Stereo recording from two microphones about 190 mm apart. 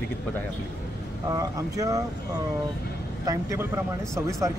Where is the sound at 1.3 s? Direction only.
20° right (ahead or behind).